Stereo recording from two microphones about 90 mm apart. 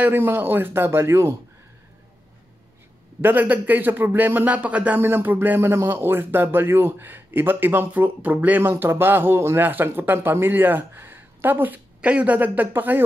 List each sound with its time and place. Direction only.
0.0 s a man's voice: 25° right (ahead or behind)
3.2 s a man's voice: 20° right (ahead or behind)